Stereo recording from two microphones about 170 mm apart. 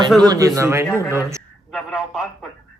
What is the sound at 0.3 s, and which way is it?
A man's voice, 20° right (ahead or behind).